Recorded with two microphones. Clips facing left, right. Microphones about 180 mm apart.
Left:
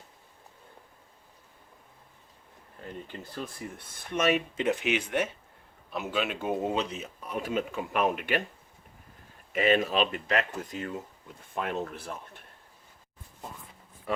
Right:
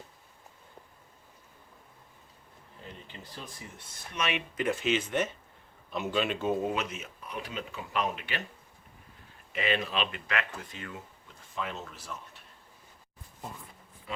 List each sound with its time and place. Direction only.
3.1 s speech: 55° left (ahead or behind)
4.5 s speech: 20° left (ahead or behind)
6.5 s speech: 20° left (ahead or behind)
6.7 s speech: 35° left (ahead or behind); by 8.4 s 50° left (ahead or behind)
9.5 s speech: 45° left (ahead or behind)
11.5 s speech: 55° left (ahead or behind)